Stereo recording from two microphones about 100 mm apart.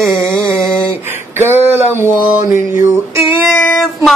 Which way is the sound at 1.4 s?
25° right (ahead or behind).